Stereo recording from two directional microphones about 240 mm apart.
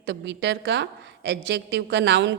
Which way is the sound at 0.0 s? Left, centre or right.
Right.